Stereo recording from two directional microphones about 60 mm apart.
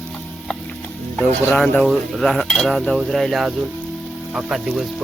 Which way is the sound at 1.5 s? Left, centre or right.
Centre.